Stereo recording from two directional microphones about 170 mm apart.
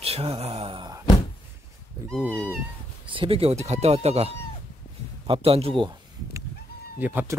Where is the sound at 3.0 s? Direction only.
30° right (ahead or behind).